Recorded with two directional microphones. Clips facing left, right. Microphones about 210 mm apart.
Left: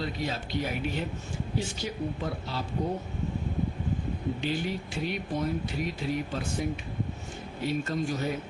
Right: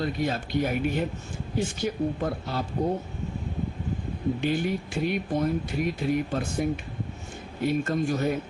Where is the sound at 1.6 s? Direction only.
50° right (ahead or behind).